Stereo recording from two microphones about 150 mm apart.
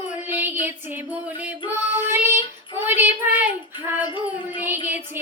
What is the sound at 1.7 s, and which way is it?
Child singing, 15° right (ahead or behind).